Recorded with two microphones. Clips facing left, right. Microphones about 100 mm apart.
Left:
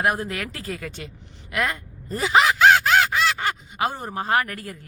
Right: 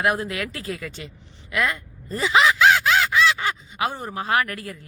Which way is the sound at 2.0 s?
50° left (ahead or behind).